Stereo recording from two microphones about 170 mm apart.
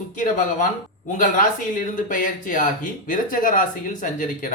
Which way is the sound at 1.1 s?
50° left (ahead or behind).